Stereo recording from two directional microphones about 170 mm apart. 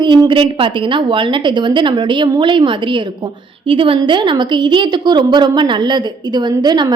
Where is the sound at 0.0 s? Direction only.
30° right (ahead or behind).